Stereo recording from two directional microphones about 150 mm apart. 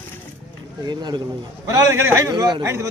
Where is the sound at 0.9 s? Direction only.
30° right (ahead or behind).